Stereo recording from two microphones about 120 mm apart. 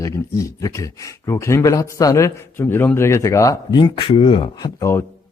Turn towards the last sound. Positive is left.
turn(degrees=20)  # may be behind; listen again after turning